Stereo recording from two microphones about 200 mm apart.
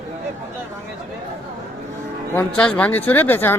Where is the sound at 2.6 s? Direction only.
5° left (ahead or behind).